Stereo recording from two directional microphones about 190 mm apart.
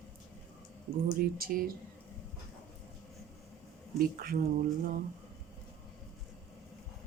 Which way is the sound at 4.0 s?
50° right (ahead or behind).